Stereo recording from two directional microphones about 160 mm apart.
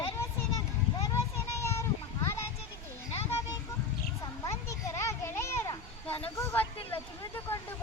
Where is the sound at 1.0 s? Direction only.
20° left (ahead or behind).